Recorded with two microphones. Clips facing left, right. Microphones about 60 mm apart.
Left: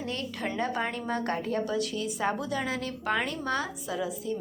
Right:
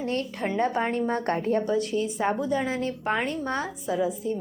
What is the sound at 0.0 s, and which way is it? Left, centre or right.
A woman's voice, right.